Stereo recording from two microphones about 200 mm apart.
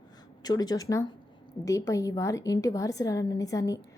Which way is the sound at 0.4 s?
20° left (ahead or behind).